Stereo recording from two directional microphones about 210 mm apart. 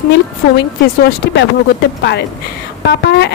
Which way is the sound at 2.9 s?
55° left (ahead or behind).